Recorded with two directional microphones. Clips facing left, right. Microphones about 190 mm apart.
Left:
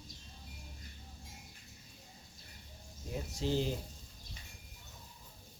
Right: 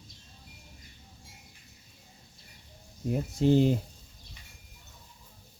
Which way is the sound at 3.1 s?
55° right (ahead or behind).